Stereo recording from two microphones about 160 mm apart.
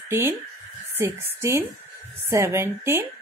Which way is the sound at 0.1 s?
15° right (ahead or behind).